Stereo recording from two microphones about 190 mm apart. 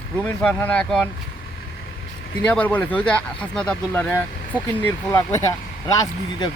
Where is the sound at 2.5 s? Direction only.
10° left (ahead or behind).